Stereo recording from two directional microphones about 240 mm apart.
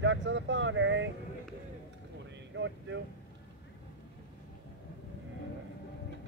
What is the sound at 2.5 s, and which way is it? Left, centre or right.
Speech, right.